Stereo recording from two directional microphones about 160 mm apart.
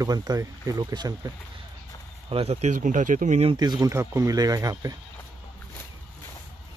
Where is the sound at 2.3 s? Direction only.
40° right (ahead or behind).